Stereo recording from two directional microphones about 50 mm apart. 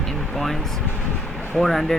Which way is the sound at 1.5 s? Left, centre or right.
Centre.